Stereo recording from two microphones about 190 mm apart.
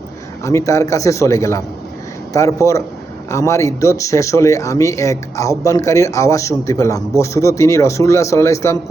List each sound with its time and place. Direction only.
0.4 s speech: 15° left (ahead or behind)